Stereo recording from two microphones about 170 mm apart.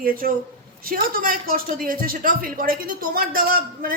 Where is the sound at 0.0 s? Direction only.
55° right (ahead or behind).